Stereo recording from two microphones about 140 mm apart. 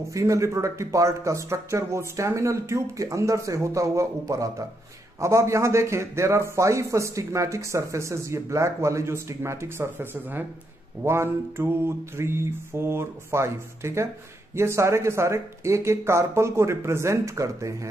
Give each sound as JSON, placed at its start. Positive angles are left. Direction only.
{"t": 0.1, "sound": "a man's voice", "side_deg": -20}
{"t": 11.1, "sound": "mantra", "side_deg": -20}
{"t": 14.5, "sound": "a man's voice", "side_deg": -20}